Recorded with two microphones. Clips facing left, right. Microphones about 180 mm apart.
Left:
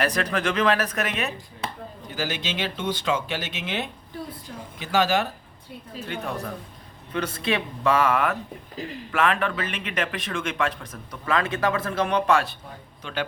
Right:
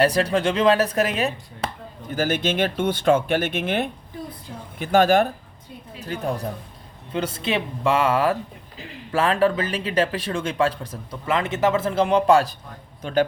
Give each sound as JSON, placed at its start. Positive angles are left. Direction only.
{"t": 0.0, "sound": "speech", "side_deg": -30}
{"t": 2.1, "sound": "speech", "side_deg": -50}
{"t": 6.1, "sound": "speech", "side_deg": -35}
{"t": 7.1, "sound": "a man's voice", "side_deg": -25}